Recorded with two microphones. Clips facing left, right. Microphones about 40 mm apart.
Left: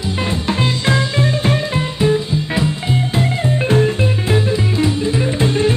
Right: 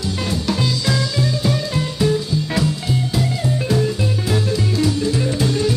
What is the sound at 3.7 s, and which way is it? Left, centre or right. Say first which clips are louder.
Music: left 5 dB; left.